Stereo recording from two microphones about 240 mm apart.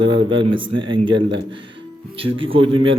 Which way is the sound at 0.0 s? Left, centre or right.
Centre.